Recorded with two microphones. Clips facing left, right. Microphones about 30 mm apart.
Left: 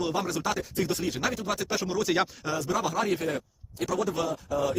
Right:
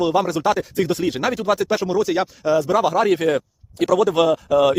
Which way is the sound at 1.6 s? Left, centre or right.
Right.